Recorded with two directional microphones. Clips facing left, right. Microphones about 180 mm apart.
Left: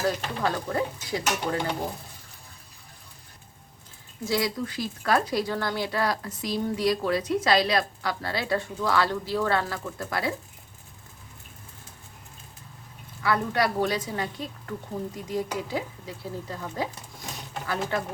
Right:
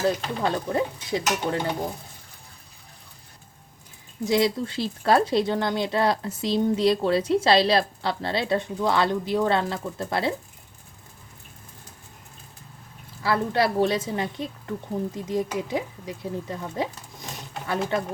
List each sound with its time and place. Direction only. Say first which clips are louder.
0.0 s speech: right 3 dB; 20° right (ahead or behind)
4.3 s speech: right 5 dB; 25° right (ahead or behind)
13.2 s speech: right 2 dB; 30° right (ahead or behind)